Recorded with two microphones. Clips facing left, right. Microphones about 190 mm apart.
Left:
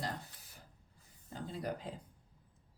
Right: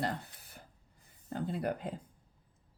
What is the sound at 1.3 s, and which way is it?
Speech, 60° right (ahead or behind).